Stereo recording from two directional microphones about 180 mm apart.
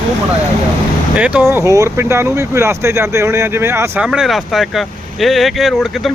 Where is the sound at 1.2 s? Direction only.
5° right (ahead or behind).